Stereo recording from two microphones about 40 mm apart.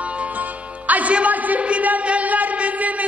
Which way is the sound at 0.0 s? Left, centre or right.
Right.